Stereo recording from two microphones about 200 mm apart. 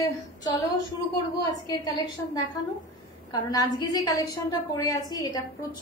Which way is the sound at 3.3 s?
20° left (ahead or behind).